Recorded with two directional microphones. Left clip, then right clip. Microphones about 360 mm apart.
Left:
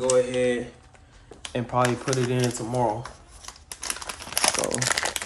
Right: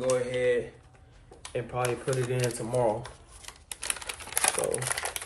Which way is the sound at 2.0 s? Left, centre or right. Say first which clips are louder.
Left 4 dB; centre.